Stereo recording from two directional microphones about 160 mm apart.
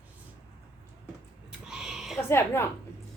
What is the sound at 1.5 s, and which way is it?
Owl, 5° right (ahead or behind).